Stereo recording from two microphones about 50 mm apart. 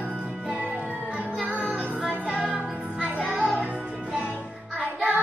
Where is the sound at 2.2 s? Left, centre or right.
Right.